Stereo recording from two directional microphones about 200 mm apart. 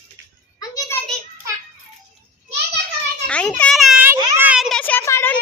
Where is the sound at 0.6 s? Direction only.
15° left (ahead or behind).